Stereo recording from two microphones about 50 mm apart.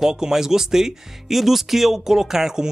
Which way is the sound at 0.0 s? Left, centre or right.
Centre.